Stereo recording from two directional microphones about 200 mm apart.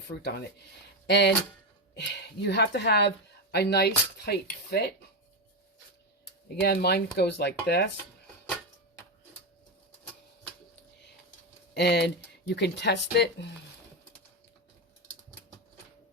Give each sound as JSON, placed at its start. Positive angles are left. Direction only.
{"t": 0.1, "sound": "speech", "side_deg": 55}
{"t": 6.6, "sound": "speech", "side_deg": 55}
{"t": 11.7, "sound": "speech", "side_deg": 55}